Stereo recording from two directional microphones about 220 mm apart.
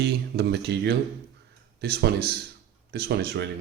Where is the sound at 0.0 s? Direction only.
50° right (ahead or behind).